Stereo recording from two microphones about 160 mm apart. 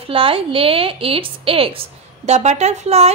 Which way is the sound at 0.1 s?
35° right (ahead or behind).